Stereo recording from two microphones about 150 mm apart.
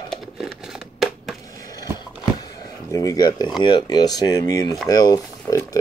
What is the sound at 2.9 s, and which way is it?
Speech, 25° left (ahead or behind).